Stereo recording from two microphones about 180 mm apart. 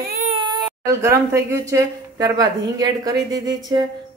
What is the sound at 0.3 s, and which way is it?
Speech, 25° right (ahead or behind).